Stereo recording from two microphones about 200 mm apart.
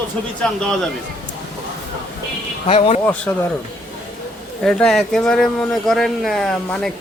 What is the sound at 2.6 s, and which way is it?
Speech, 30° left (ahead or behind).